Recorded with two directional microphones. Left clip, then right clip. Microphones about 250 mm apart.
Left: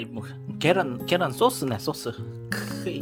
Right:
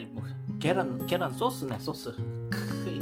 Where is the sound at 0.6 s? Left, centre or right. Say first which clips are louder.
Left 6 dB; left.